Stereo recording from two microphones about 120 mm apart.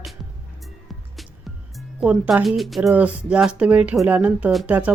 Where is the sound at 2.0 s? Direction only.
10° right (ahead or behind).